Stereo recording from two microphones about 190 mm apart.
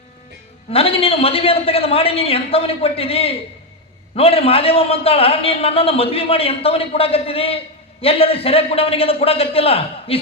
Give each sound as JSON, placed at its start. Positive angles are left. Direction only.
{"t": 0.7, "sound": "a man's voice", "side_deg": 30}